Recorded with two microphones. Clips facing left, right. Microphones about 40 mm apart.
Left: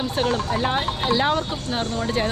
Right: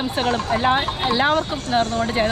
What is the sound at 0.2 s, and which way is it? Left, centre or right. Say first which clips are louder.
Speech: right 2 dB; centre.